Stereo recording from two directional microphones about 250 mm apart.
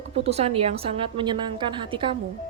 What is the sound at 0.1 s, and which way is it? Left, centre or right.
A woman's voice, right.